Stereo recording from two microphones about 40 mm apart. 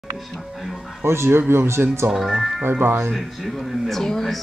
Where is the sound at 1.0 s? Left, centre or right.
Right.